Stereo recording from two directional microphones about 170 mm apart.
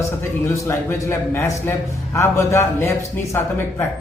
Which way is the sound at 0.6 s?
15° left (ahead or behind).